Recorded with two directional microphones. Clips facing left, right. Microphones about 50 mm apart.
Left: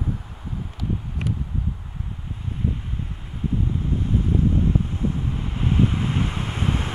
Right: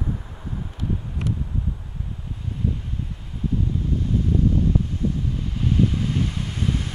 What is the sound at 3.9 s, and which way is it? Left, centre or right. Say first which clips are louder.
Vehicle: even; left.